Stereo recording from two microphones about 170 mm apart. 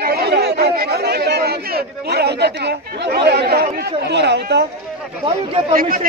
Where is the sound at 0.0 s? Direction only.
65° right (ahead or behind).